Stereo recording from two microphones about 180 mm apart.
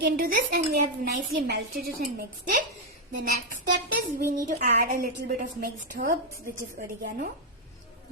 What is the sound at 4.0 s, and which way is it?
A woman's voice, 55° right (ahead or behind).